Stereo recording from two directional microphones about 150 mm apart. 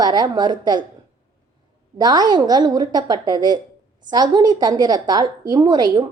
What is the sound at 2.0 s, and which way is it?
A woman's voice, 30° right (ahead or behind).